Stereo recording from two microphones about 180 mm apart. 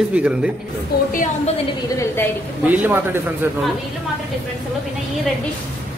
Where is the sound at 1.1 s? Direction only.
45° left (ahead or behind).